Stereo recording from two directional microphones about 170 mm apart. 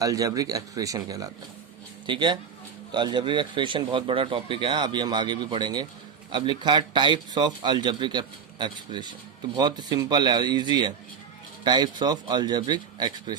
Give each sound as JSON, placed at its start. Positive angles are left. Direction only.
{"t": 0.0, "sound": "speech", "side_deg": -20}